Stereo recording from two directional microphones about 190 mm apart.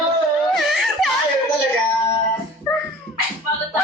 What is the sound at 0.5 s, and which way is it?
Whimper, centre (ahead or behind).